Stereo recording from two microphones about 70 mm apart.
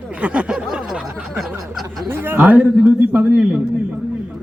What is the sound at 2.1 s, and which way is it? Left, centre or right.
A man's voice, right.